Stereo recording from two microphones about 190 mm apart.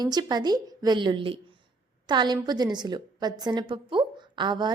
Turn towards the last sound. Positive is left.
turn(degrees=-25)  # may be behind; listen again after turning